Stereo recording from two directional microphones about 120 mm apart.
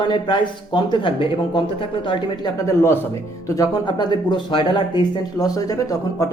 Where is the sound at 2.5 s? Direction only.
20° left (ahead or behind).